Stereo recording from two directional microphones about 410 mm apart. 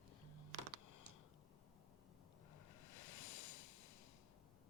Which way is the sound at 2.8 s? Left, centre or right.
Left.